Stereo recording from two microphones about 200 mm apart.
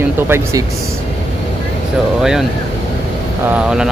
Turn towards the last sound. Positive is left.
turn(degrees=-5)  # may be behind; listen again after turning